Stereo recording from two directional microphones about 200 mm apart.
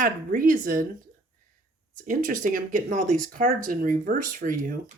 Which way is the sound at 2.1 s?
40° right (ahead or behind).